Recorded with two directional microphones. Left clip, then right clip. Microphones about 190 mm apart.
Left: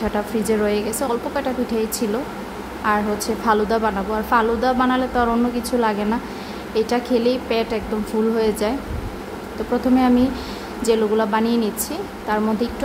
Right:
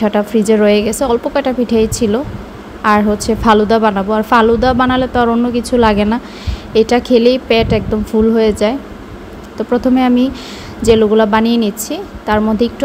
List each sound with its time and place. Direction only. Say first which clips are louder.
0.0 s a woman's voice: right 9 dB; 30° right (ahead or behind)